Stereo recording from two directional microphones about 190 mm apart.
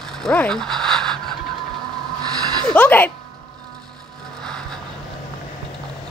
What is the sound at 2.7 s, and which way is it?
Speech, 10° left (ahead or behind).